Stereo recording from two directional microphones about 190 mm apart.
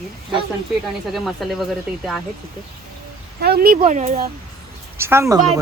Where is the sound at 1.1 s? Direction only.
Centre (ahead or behind).